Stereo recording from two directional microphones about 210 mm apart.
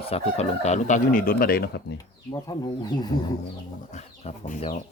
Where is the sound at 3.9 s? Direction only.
35° left (ahead or behind).